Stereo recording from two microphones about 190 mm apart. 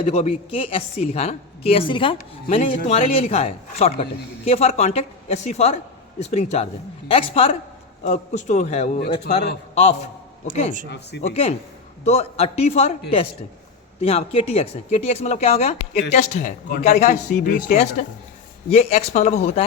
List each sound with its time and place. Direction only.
0.0 s a woman's voice: 30° left (ahead or behind)
8.0 s a woman's voice: 40° left (ahead or behind)
10.8 s speech: 60° left (ahead or behind)
11.2 s a woman's voice: 35° left (ahead or behind)